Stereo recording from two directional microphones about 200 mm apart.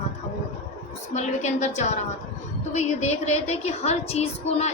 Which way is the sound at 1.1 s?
35° left (ahead or behind).